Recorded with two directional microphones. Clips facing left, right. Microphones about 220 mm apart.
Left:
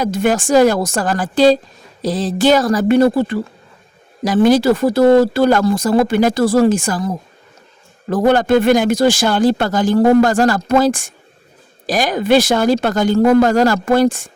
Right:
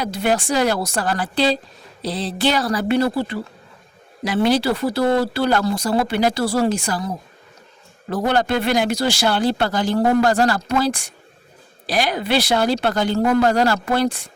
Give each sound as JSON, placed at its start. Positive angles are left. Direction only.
{"t": 0.0, "sound": "speech", "side_deg": 50}
{"t": 4.4, "sound": "speech", "side_deg": 50}
{"t": 8.1, "sound": "speech", "side_deg": 50}